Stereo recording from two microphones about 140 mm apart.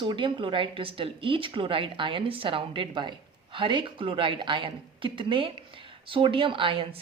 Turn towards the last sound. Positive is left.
turn(degrees=-40)  # may be behind; listen again after turning